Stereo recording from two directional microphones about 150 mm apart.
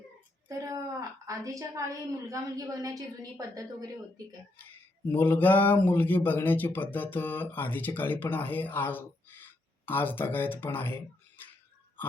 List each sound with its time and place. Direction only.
0.4 s a woman's voice: 20° right (ahead or behind)
5.1 s speech: 10° left (ahead or behind)